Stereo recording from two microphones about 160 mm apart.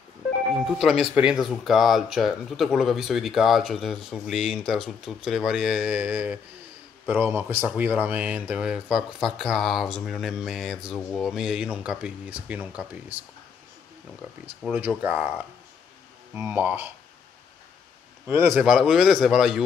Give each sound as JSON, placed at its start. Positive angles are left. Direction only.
{"t": 0.7, "sound": "speech", "side_deg": 0}
{"t": 14.7, "sound": "speech", "side_deg": -10}
{"t": 18.2, "sound": "speech", "side_deg": -15}